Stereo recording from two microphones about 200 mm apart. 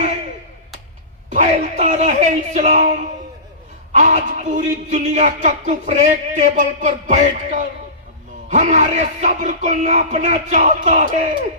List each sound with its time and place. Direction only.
1.3 s speech: 35° right (ahead or behind)